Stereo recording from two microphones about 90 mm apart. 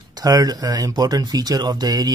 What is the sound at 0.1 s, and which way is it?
Speech, 45° right (ahead or behind).